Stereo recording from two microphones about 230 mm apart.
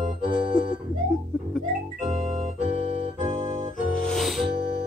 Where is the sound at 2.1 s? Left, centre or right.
Right.